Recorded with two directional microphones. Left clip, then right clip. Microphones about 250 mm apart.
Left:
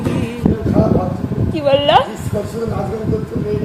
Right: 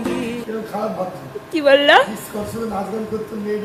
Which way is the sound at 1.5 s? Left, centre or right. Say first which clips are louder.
Right 1 dB; centre.